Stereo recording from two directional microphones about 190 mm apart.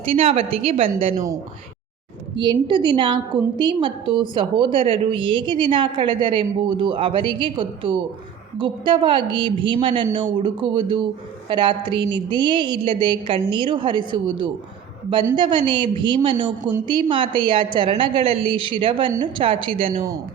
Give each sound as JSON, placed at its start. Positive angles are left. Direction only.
{"t": 0.0, "sound": "a woman's voice", "side_deg": -30}
{"t": 2.3, "sound": "a woman's voice", "side_deg": -25}